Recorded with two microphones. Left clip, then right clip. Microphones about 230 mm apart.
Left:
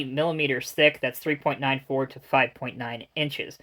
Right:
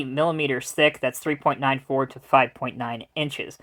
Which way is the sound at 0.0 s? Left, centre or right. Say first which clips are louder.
Right 2 dB; right.